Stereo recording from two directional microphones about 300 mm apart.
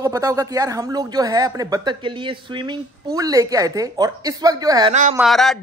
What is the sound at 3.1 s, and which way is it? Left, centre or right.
A man's voice, centre.